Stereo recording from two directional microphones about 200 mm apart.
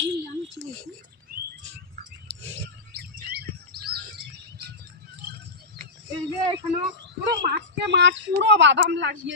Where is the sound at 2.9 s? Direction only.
50° right (ahead or behind).